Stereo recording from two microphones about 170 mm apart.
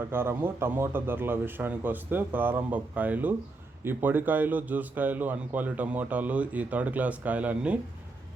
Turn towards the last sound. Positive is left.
turn(degrees=-10)  # may be behind; listen again after turning